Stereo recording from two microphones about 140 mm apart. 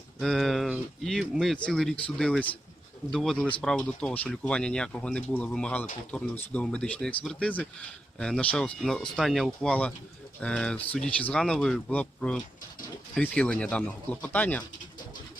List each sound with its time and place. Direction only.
0.2 s speech: centre (ahead or behind)